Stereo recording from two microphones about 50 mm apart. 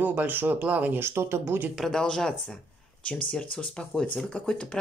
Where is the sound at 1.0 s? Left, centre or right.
Right.